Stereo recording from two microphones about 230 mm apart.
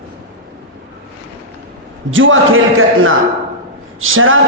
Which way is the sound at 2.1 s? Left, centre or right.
Right.